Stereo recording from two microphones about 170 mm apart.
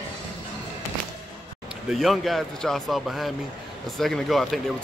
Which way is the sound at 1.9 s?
Centre (ahead or behind).